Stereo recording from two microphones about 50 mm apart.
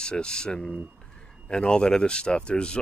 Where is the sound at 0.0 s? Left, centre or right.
Centre.